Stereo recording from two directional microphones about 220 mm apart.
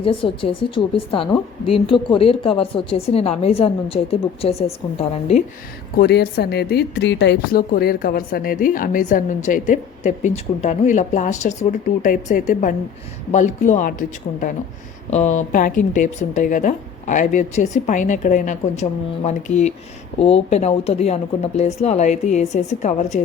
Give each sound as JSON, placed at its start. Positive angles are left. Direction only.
{"t": 0.0, "sound": "a woman's voice", "side_deg": 25}
{"t": 6.0, "sound": "speech", "side_deg": 45}
{"t": 15.1, "sound": "speech", "side_deg": 30}